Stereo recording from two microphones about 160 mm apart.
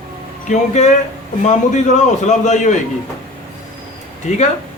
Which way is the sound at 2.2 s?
50° left (ahead or behind).